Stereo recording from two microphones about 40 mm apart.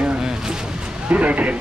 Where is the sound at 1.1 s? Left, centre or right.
Right.